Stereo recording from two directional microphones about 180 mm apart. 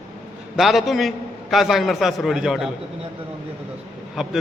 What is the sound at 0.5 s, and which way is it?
A man's voice, centre (ahead or behind).